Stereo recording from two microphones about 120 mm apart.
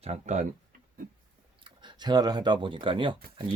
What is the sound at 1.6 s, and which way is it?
Speech, 40° right (ahead or behind).